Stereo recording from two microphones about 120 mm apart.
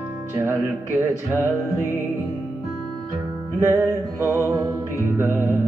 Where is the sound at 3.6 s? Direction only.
20° right (ahead or behind).